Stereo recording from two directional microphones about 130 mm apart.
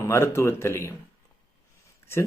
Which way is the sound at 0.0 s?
20° left (ahead or behind).